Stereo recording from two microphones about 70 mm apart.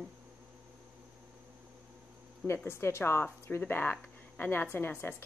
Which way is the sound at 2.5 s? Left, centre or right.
Left.